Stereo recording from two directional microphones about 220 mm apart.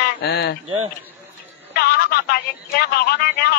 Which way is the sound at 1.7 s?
45° left (ahead or behind).